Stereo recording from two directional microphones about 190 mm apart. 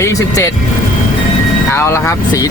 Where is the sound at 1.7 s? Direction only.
15° left (ahead or behind).